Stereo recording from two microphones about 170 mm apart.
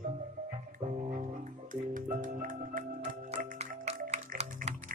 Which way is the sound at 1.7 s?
50° right (ahead or behind).